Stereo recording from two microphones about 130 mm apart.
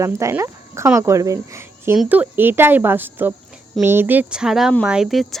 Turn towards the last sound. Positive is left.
turn(degrees=-5)  # may be behind; listen again after turning